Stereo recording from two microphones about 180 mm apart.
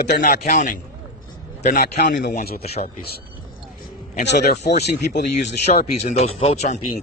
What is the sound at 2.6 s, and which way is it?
Speech, 35° left (ahead or behind).